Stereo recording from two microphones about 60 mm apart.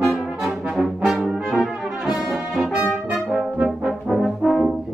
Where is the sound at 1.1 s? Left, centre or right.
Centre.